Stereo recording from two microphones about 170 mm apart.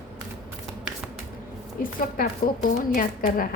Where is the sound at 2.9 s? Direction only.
55° left (ahead or behind).